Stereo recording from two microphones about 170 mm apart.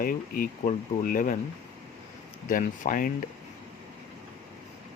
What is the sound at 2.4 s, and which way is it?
Speech, 50° left (ahead or behind).